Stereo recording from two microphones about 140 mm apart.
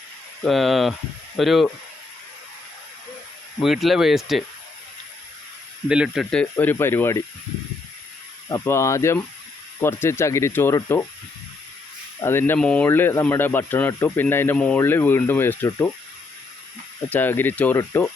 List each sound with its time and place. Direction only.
0.4 s speech: centre (ahead or behind)
3.6 s speech: centre (ahead or behind)
5.9 s speech: 5° right (ahead or behind)
6.3 s speech: 10° left (ahead or behind)
8.4 s speech: 20° left (ahead or behind)
12.2 s speech: 15° left (ahead or behind)
17.1 s speech: 15° left (ahead or behind)